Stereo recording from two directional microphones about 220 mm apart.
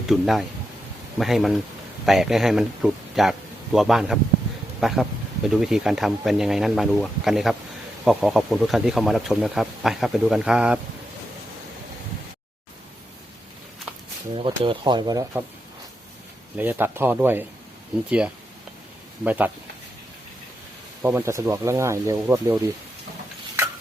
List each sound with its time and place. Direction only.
0.1 s speech: centre (ahead or behind)
14.3 s speech: 25° right (ahead or behind)
16.6 s speech: 10° right (ahead or behind)
19.2 s speech: 5° right (ahead or behind)
21.0 s speech: 10° right (ahead or behind)